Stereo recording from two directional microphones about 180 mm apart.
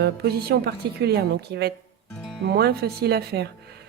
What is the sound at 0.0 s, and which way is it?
Speech, 65° right (ahead or behind).